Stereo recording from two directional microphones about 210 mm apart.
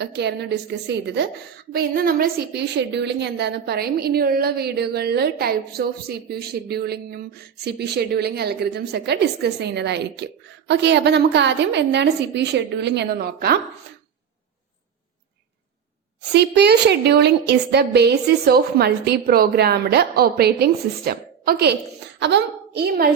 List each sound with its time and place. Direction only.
0.0 s a woman's voice: 55° right (ahead or behind)
16.3 s a woman's voice: 50° right (ahead or behind)